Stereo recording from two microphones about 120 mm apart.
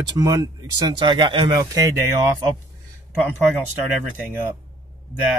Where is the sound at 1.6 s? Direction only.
30° right (ahead or behind).